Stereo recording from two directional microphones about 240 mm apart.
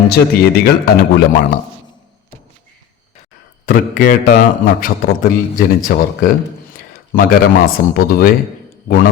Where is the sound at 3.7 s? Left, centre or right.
Left.